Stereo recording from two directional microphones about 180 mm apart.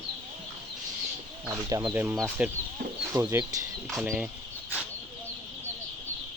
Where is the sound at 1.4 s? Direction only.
20° right (ahead or behind).